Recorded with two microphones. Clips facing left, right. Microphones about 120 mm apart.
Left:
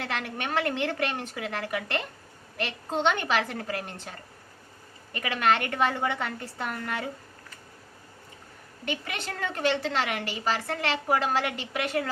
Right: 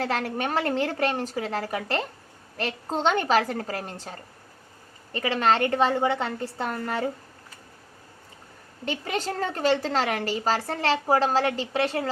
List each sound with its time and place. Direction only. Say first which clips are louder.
0.0 s a woman's voice: right 6 dB; 35° right (ahead or behind)
5.1 s a woman's voice: right 3 dB; 30° right (ahead or behind)
8.8 s a woman's voice: right 5 dB; 35° right (ahead or behind)